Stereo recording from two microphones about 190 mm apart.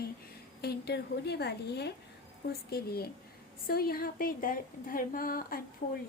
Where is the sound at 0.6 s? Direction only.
55° left (ahead or behind).